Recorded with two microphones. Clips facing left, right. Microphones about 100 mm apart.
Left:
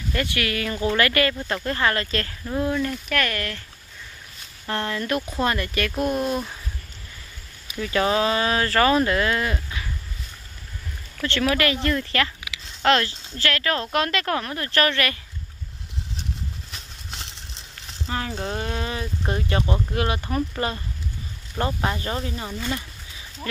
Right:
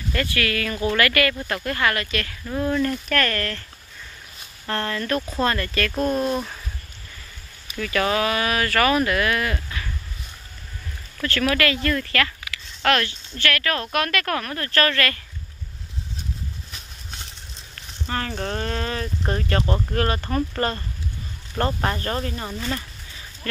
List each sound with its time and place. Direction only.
0.1 s speech: 20° left (ahead or behind)
2.4 s speech: 10° left (ahead or behind)
4.6 s speech: 15° left (ahead or behind)
7.7 s speech: 20° left (ahead or behind)
11.2 s speech: 25° left (ahead or behind)
18.0 s speech: 10° left (ahead or behind)
23.5 s a sound: 15° left (ahead or behind)